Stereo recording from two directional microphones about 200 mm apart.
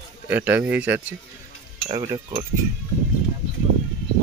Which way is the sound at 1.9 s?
25° right (ahead or behind).